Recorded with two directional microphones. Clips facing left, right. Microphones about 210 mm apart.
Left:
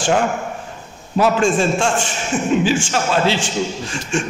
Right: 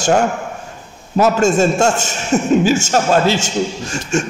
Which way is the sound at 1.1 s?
45° right (ahead or behind).